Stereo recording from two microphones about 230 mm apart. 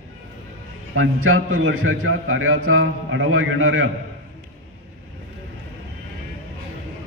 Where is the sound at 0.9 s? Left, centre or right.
Right.